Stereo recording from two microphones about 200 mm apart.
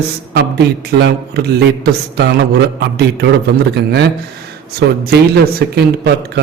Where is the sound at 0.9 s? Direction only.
60° right (ahead or behind).